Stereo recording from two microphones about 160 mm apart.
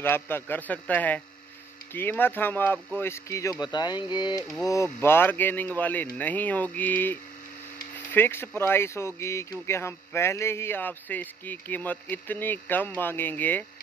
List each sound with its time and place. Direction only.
0.0 s speech: 15° left (ahead or behind)